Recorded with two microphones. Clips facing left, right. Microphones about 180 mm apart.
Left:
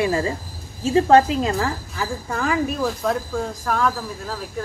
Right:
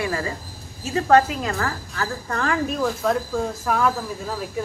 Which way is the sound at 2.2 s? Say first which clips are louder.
Left 2 dB; 5° left (ahead or behind).